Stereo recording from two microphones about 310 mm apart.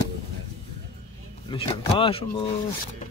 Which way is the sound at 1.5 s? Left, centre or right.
Centre.